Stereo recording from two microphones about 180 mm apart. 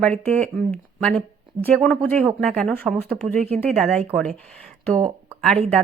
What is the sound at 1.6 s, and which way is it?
Speech, 5° left (ahead or behind).